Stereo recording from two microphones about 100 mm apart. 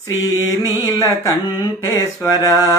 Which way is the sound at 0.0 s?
30° left (ahead or behind).